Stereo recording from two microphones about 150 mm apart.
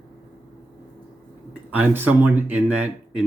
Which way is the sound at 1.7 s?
15° right (ahead or behind).